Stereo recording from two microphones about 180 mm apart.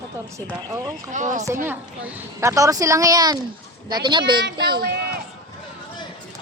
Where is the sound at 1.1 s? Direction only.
45° right (ahead or behind).